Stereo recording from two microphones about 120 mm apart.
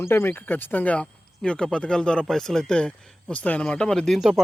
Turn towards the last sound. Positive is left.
turn(degrees=0)  # may be behind; listen again after turning